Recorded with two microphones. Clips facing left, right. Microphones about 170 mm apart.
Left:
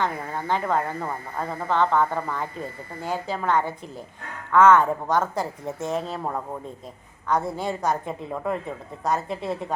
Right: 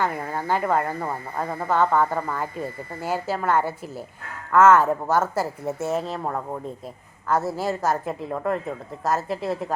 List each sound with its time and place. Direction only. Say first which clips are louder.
0.0 s a woman's voice: right 1 dB; 5° right (ahead or behind)